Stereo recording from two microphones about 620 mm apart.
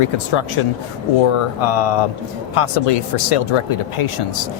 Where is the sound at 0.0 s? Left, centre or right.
Left.